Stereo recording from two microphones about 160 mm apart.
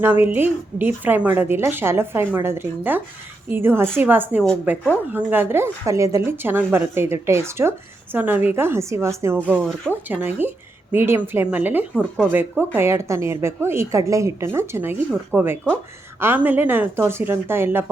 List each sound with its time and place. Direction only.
0.0 s a woman's voice: 15° right (ahead or behind)